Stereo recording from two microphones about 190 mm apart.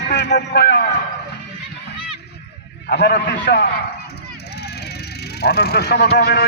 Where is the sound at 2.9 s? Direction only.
60° left (ahead or behind).